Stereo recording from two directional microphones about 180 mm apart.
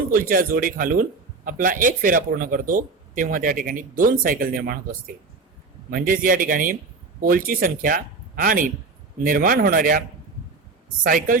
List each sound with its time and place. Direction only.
0.1 s speech: 50° right (ahead or behind)
11.0 s speech: 50° right (ahead or behind)